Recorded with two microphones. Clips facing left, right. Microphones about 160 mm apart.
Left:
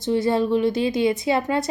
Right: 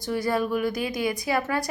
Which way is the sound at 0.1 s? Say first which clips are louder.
Left 5 dB; 25° left (ahead or behind).